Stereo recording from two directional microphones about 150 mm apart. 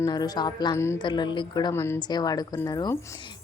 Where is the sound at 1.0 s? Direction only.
30° left (ahead or behind).